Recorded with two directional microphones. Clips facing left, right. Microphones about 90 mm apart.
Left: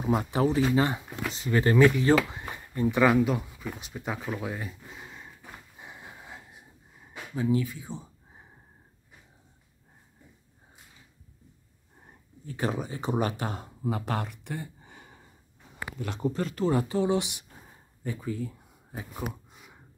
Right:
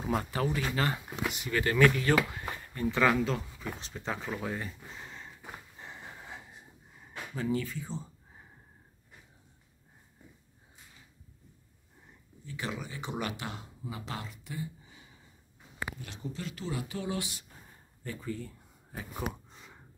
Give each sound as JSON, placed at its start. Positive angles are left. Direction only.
{"t": 0.0, "sound": "speech", "side_deg": 10}
{"t": 0.3, "sound": "speech", "side_deg": 25}
{"t": 1.3, "sound": "speech", "side_deg": 30}
{"t": 5.8, "sound": "wheeze", "side_deg": 5}
{"t": 7.3, "sound": "speech", "side_deg": 5}
{"t": 12.0, "sound": "speech", "side_deg": 45}
{"t": 13.8, "sound": "a sound", "side_deg": 55}
{"t": 16.0, "sound": "speech", "side_deg": 55}
{"t": 17.0, "sound": "a sound", "side_deg": 20}